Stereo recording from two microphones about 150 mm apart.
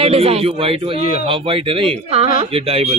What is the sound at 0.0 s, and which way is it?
Speech, 40° right (ahead or behind).